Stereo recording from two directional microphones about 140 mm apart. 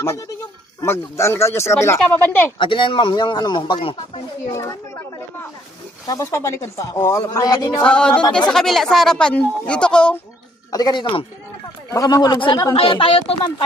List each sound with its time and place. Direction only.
0.0 s speech: 20° left (ahead or behind)
2.6 s speech: 35° left (ahead or behind)
6.1 s speech: 25° left (ahead or behind)
7.9 s speech: 5° left (ahead or behind)
10.7 s speech: 30° left (ahead or behind)
11.9 s speech: 25° left (ahead or behind); by 13.3 s 40° left (ahead or behind)